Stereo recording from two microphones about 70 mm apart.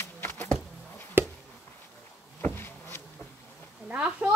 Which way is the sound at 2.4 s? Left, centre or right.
Left.